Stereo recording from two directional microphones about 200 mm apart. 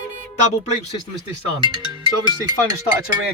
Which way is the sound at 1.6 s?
20° right (ahead or behind).